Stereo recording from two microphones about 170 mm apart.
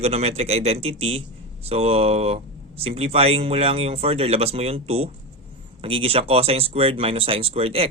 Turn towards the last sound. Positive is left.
turn(degrees=-35)  # may be behind; listen again after turning